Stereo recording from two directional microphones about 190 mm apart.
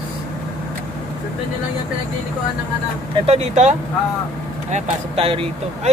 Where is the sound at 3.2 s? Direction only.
35° right (ahead or behind).